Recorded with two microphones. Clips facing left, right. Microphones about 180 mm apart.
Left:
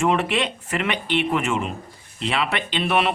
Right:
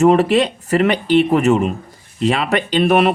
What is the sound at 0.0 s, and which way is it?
Speech, 40° right (ahead or behind).